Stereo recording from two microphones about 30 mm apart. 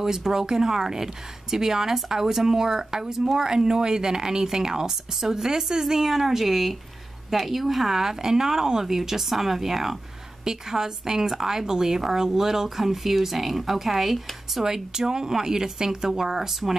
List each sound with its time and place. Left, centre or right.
0.0 s a woman's voice: centre
14.6 s a woman's voice: centre